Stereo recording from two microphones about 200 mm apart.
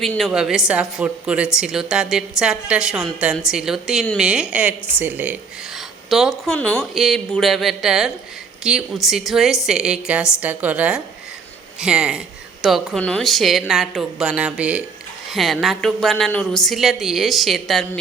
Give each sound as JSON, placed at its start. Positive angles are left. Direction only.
{"t": 0.0, "sound": "a woman's voice", "side_deg": 0}